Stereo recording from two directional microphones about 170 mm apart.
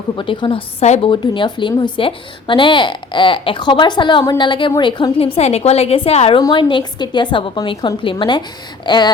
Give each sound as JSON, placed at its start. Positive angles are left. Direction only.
{"t": 0.2, "sound": "a woman's voice", "side_deg": 30}